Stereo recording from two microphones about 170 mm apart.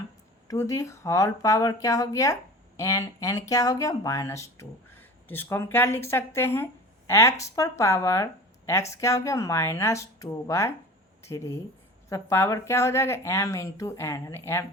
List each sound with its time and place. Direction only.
0.4 s speech: 15° left (ahead or behind)